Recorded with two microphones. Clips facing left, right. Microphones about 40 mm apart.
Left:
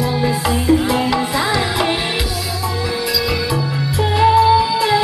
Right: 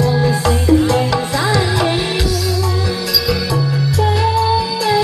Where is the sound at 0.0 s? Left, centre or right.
Centre.